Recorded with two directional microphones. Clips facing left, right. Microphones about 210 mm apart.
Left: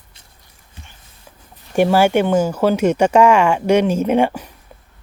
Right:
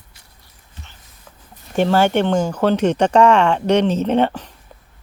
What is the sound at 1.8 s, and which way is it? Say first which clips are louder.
Speech: left 2 dB; 10° left (ahead or behind).